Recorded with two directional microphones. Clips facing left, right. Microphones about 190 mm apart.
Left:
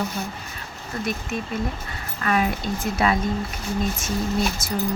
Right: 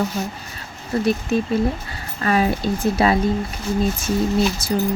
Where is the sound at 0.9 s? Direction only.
30° right (ahead or behind).